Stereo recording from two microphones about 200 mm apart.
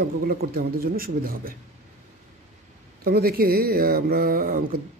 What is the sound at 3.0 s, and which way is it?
Speech, 50° right (ahead or behind).